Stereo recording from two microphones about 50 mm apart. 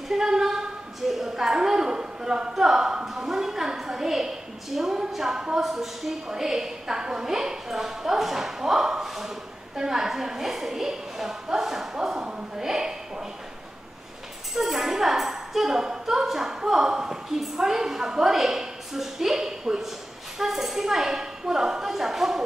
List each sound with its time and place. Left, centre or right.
0.1 s a woman's voice: centre
14.6 s a woman's voice: centre